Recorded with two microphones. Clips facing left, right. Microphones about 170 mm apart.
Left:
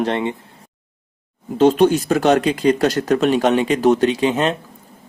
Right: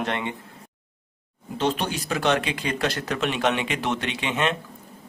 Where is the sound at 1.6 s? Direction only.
45° left (ahead or behind).